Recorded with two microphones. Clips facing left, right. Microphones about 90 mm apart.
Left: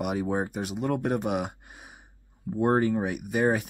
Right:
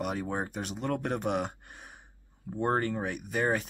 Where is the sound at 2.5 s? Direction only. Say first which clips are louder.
Left 5 dB; 5° left (ahead or behind).